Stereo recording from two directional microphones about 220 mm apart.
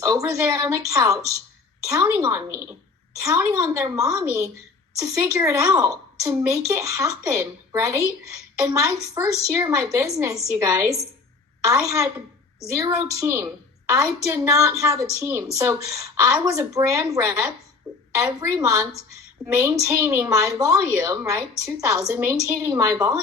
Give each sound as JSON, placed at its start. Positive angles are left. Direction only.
{"t": 0.0, "sound": "a woman's voice", "side_deg": -15}